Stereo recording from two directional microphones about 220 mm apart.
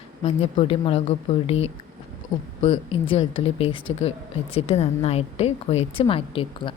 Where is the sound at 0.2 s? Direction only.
25° left (ahead or behind).